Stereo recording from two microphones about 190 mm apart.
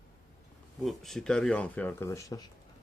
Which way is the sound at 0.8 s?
Centre (ahead or behind).